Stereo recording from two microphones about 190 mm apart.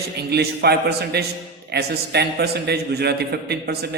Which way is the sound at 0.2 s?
60° right (ahead or behind).